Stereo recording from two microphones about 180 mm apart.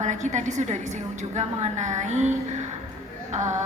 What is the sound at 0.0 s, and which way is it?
A woman's voice, 40° right (ahead or behind).